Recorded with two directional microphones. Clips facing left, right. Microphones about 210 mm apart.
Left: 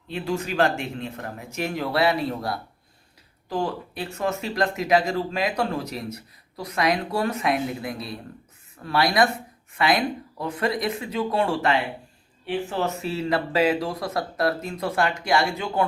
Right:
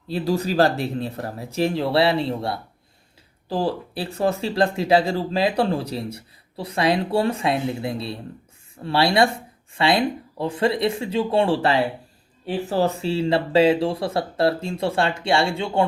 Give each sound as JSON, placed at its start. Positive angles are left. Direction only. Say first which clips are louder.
{"t": 0.1, "sound": "speech", "louder": "right 5 dB", "side_deg": -35}